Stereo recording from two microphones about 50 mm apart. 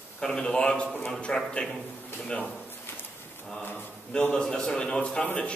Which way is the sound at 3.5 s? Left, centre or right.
Left.